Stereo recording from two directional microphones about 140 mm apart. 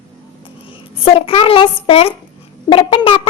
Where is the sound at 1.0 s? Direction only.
40° left (ahead or behind).